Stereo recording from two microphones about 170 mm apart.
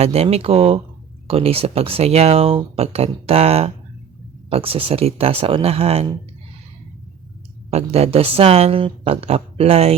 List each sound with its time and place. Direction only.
0.0 s speech: 35° right (ahead or behind)
7.7 s speech: 40° right (ahead or behind)